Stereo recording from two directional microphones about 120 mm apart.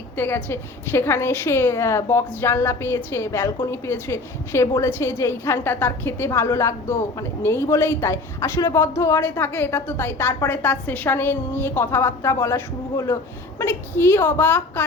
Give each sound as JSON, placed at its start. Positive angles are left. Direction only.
{"t": 0.2, "sound": "a woman's voice", "side_deg": 15}